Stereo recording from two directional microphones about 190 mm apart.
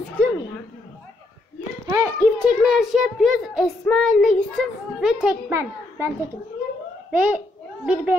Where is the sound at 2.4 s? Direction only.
Centre (ahead or behind).